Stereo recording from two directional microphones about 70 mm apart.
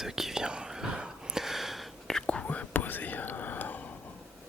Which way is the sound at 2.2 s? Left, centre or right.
Centre.